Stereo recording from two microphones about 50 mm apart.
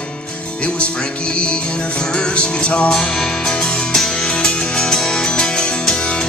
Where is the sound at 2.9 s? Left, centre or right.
Centre.